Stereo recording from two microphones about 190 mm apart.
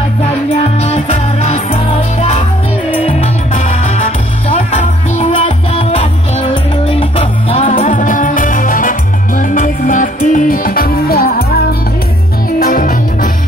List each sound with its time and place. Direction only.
0.7 s music: 35° left (ahead or behind)
5.1 s music: 30° left (ahead or behind); by 11.4 s 55° left (ahead or behind)
12.5 s music: 50° left (ahead or behind)